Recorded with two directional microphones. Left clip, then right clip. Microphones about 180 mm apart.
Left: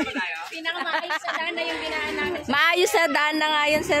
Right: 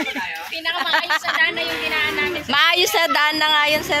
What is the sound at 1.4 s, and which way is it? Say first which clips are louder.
Speech: right 8 dB; 35° left (ahead or behind).